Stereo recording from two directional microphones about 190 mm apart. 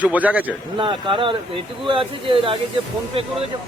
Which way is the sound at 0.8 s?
25° right (ahead or behind).